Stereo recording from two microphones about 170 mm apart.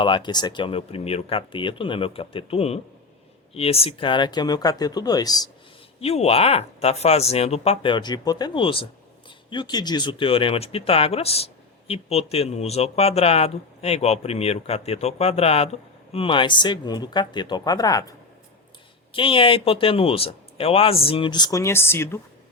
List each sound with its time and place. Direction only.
0.0 s speech: 25° left (ahead or behind)
6.0 s speech: 35° left (ahead or behind); by 18.1 s 20° left (ahead or behind)
19.1 s speech: 30° left (ahead or behind); by 22.2 s 15° left (ahead or behind)